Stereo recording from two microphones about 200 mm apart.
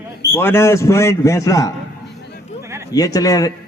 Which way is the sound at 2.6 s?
15° right (ahead or behind).